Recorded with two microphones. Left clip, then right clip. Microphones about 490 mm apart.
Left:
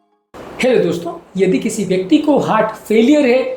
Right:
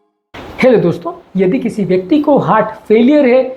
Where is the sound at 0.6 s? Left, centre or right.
Right.